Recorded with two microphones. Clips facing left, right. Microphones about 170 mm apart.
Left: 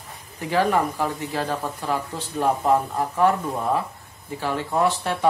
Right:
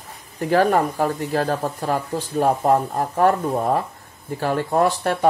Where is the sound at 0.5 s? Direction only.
45° right (ahead or behind).